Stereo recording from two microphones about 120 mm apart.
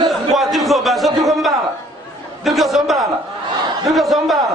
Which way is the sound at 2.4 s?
Centre (ahead or behind).